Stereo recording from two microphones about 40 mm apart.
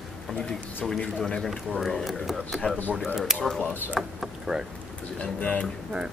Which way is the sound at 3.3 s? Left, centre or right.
Centre.